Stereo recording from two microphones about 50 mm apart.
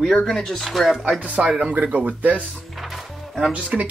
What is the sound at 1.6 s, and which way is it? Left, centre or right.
Speech, right.